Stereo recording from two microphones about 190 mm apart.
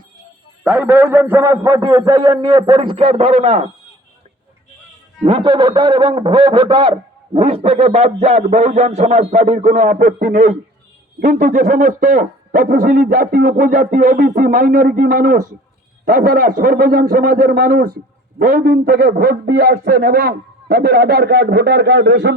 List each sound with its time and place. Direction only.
0.6 s a man's voice: 10° right (ahead or behind); by 3.7 s 30° right (ahead or behind)
5.2 s a man's voice: 25° right (ahead or behind); by 22.3 s 60° right (ahead or behind)